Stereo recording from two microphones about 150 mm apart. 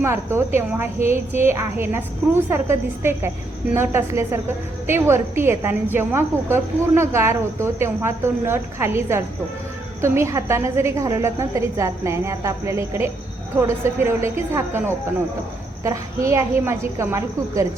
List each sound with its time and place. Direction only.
0.0 s a woman's voice: 15° right (ahead or behind)